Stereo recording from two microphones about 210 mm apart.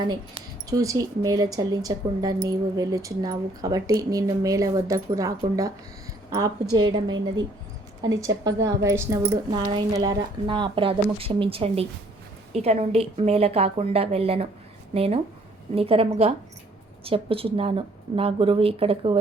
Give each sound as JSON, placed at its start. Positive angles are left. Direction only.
{"t": 0.1, "sound": "speech", "side_deg": -20}
{"t": 6.7, "sound": "a woman's voice", "side_deg": -20}
{"t": 8.2, "sound": "a woman's voice", "side_deg": -15}